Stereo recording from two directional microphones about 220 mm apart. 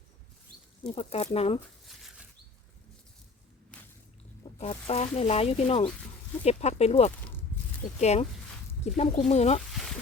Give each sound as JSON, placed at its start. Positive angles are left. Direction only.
{"t": 0.9, "sound": "speech", "side_deg": 30}
{"t": 4.5, "sound": "speech", "side_deg": 30}